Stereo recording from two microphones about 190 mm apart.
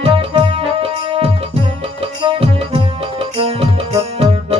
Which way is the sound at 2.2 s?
30° right (ahead or behind).